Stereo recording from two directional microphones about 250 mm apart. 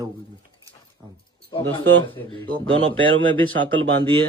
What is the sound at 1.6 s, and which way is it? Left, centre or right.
Speech, right.